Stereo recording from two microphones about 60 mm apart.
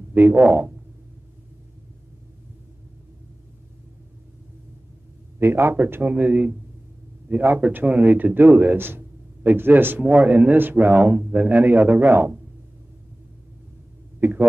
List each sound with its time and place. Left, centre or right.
0.1 s speech: right
0.4 s a man's voice: centre
5.4 s a man's voice: right
6.0 s a man's voice: right
10.0 s a man's voice: right
14.2 s speech: right